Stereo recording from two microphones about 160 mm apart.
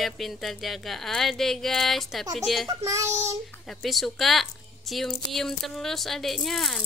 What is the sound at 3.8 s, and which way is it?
Speech, centre (ahead or behind).